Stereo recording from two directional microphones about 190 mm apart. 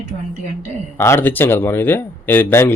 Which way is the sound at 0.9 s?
15° left (ahead or behind).